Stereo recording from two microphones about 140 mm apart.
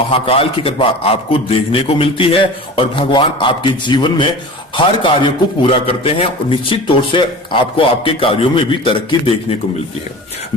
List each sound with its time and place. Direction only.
0.1 s a man's voice: 45° left (ahead or behind)